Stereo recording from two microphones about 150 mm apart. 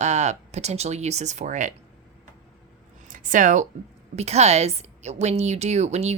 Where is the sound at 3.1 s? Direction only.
60° right (ahead or behind).